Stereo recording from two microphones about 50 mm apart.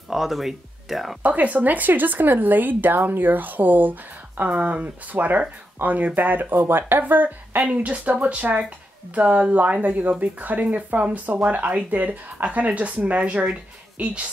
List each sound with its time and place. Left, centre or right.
0.1 s speech: centre
1.2 s speech: right
7.6 s speech: right